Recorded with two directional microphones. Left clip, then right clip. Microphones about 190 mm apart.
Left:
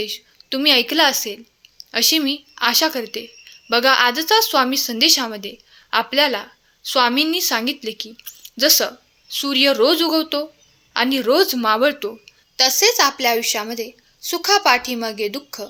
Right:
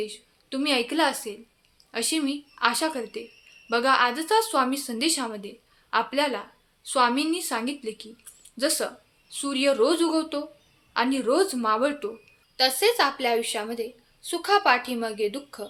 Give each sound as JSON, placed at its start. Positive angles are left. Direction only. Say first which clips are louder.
{"t": 0.0, "sound": "speech", "louder": "left 7 dB", "side_deg": 35}